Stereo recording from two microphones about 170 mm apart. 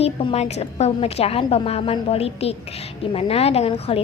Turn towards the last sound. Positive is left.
turn(degrees=35)  # may be behind; listen again after turning